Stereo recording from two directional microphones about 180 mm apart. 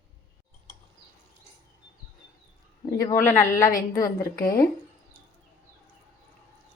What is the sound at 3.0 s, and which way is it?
Speech, 15° left (ahead or behind).